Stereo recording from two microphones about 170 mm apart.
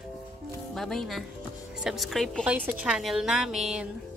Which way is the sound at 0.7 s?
Centre (ahead or behind).